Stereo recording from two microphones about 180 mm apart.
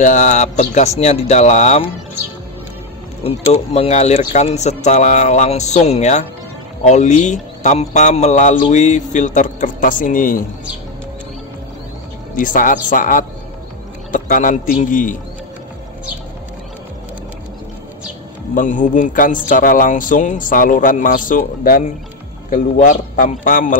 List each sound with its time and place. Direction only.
0.0 s speech: 45° left (ahead or behind)
3.3 s speech: 35° left (ahead or behind); by 10.4 s 50° left (ahead or behind)
12.4 s speech: 50° left (ahead or behind)
18.5 s speech: 45° left (ahead or behind)